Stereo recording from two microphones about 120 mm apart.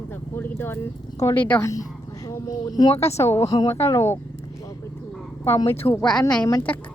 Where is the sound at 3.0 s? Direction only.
20° left (ahead or behind).